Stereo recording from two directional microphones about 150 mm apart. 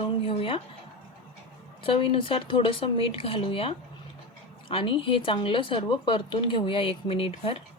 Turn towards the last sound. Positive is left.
turn(degrees=40)  # may be behind; listen again after turning